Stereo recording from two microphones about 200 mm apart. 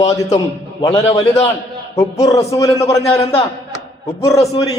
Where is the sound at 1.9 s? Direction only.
15° left (ahead or behind).